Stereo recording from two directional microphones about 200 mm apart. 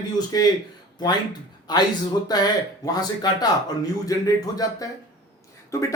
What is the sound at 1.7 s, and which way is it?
Speech, 20° left (ahead or behind).